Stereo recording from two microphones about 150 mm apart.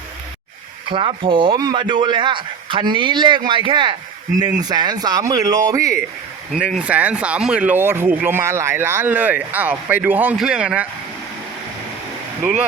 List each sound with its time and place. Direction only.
0.9 s speech: 35° right (ahead or behind)
6.5 s speech: 5° right (ahead or behind)